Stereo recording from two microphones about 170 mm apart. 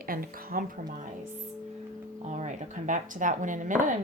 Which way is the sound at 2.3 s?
45° right (ahead or behind).